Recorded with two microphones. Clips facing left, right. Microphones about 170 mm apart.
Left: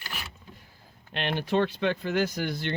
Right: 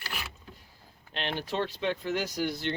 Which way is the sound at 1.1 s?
60° left (ahead or behind).